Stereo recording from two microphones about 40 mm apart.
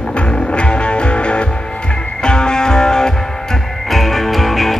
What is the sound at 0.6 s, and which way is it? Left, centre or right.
Music, left.